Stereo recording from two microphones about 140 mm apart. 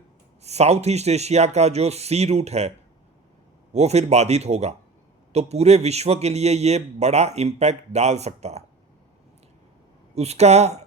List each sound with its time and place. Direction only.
0.4 s a man's voice: 50° right (ahead or behind)
10.2 s a man's voice: 50° right (ahead or behind)